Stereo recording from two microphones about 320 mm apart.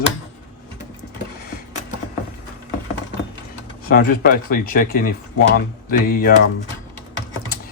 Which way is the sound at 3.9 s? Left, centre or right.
Left.